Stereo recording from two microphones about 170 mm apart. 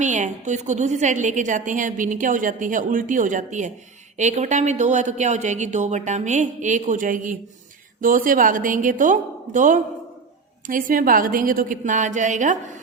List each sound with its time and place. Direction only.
0.0 s a woman's voice: 45° right (ahead or behind)